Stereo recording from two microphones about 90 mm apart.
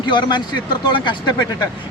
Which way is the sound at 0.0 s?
60° left (ahead or behind).